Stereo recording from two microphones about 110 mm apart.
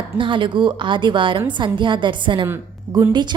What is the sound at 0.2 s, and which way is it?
A woman's voice, 50° right (ahead or behind).